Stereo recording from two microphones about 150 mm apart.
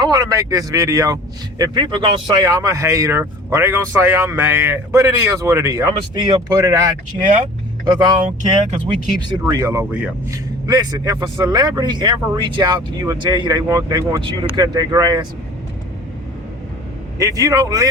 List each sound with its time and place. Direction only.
0.0 s speech: 25° right (ahead or behind)
2.4 s speech: 20° right (ahead or behind)
9.5 s speech: 20° right (ahead or behind)
10.2 s speech: 25° right (ahead or behind)
14.2 s speech: 30° right (ahead or behind)
17.2 s speech: 20° right (ahead or behind)